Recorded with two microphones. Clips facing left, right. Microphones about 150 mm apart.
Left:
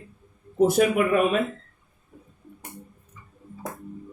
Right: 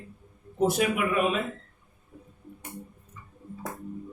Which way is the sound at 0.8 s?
45° left (ahead or behind).